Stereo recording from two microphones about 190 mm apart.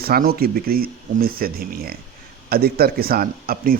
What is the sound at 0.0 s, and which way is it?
A man's voice, 55° right (ahead or behind).